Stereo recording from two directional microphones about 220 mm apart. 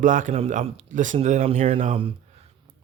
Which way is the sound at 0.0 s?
35° right (ahead or behind).